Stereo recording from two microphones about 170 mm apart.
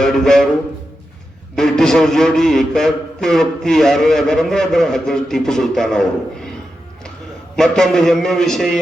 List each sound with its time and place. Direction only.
0.0 s music: 5° left (ahead or behind)
1.5 s a man's voice: 5° left (ahead or behind)
7.5 s a man's voice: centre (ahead or behind)